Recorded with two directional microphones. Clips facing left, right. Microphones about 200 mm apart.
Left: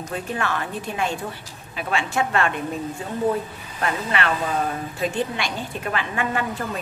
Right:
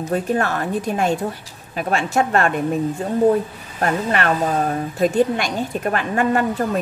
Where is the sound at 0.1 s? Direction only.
45° right (ahead or behind).